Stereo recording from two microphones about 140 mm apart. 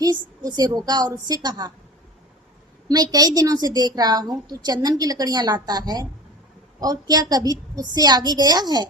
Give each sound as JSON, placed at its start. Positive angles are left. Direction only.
{"t": 0.0, "sound": "a woman's voice", "side_deg": -25}
{"t": 2.9, "sound": "a woman's voice", "side_deg": -25}